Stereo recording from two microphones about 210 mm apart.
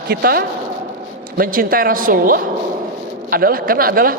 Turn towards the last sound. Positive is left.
turn(degrees=-45)  # may be behind; listen again after turning